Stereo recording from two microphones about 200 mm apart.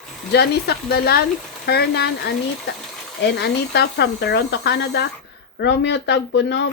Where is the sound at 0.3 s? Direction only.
55° left (ahead or behind).